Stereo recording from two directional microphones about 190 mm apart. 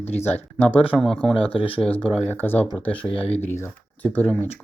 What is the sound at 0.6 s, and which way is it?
Speech, 10° left (ahead or behind).